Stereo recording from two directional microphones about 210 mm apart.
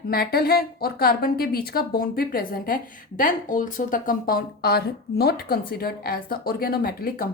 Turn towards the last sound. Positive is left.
turn(degrees=45)  # may be behind; listen again after turning